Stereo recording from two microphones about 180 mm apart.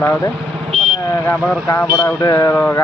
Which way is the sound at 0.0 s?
15° left (ahead or behind).